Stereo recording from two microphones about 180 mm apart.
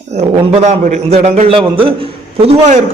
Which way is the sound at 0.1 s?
40° right (ahead or behind).